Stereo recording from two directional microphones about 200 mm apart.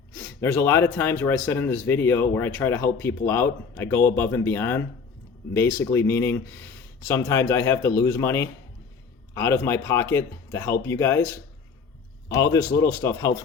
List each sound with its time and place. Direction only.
0.1 s speech: 15° left (ahead or behind)
12.3 s speech: 15° left (ahead or behind)